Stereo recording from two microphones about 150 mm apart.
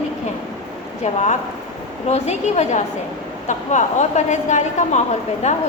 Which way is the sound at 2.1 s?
50° left (ahead or behind).